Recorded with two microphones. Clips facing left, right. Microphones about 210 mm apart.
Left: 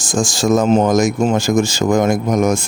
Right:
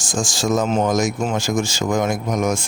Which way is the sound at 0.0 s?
45° left (ahead or behind).